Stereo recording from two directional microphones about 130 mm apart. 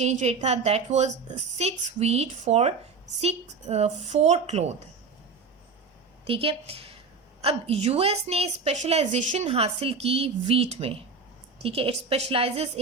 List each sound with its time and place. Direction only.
0.0 s a woman's voice: 60° right (ahead or behind)
6.2 s a woman's voice: 45° right (ahead or behind)